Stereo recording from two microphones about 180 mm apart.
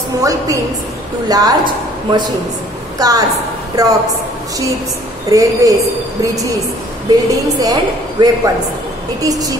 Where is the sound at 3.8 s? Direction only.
20° right (ahead or behind).